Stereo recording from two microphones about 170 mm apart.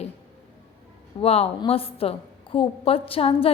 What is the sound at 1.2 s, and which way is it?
A woman's voice, 35° left (ahead or behind).